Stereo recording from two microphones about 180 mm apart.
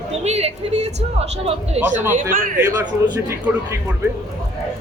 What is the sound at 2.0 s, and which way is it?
Speech, 10° right (ahead or behind).